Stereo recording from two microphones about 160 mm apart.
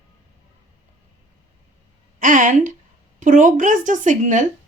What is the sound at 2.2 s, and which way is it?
A woman's voice, 55° right (ahead or behind).